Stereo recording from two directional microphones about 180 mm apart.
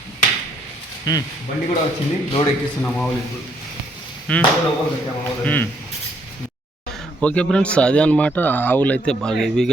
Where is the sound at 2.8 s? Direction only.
5° left (ahead or behind).